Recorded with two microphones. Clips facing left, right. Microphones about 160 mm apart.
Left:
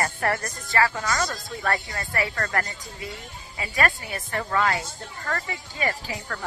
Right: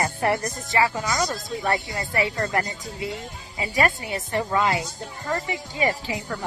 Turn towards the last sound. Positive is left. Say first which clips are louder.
# right 4 dB
turn(degrees=-15)  # may be behind; listen again after turning